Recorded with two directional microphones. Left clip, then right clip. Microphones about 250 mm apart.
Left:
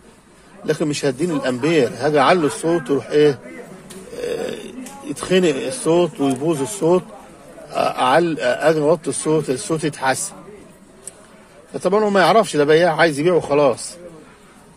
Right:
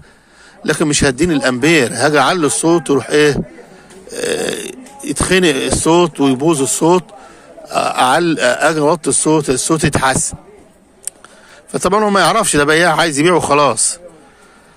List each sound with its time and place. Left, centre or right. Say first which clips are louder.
0.7 s a man's voice: right 6 dB; right
11.7 s a man's voice: right 4 dB; right